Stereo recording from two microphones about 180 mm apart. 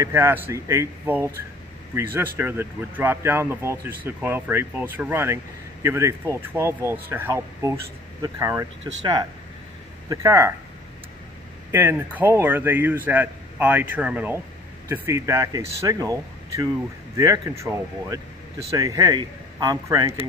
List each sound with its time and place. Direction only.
0.0 s speech: 15° right (ahead or behind)
11.7 s speech: 10° right (ahead or behind)